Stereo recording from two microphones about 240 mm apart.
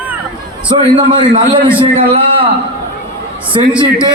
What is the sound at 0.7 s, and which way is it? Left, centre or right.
A man's voice, centre.